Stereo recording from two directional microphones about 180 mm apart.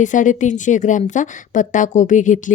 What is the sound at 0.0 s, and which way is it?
A woman's voice, 45° left (ahead or behind).